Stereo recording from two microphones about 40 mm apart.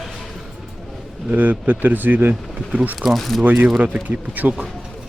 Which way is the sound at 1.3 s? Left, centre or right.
Right.